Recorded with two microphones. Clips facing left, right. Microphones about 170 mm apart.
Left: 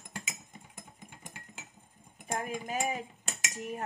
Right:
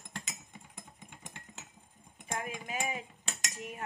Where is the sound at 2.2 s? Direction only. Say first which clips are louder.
Left 4 dB; 40° left (ahead or behind).